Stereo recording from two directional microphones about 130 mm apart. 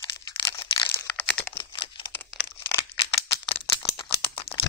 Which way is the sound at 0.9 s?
10° left (ahead or behind).